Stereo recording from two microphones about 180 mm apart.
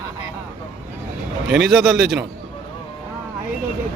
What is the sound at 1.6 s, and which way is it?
Speech, centre (ahead or behind).